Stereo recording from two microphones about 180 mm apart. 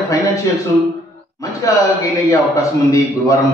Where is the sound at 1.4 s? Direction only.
15° left (ahead or behind).